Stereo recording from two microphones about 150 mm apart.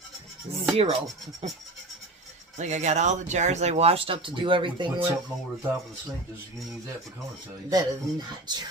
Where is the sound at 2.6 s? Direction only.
50° right (ahead or behind); by 4.9 s 35° right (ahead or behind).